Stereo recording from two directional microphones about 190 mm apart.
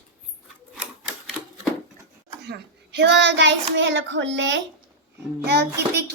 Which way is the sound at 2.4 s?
65° right (ahead or behind).